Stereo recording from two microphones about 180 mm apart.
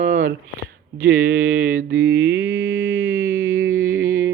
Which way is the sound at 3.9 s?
55° right (ahead or behind).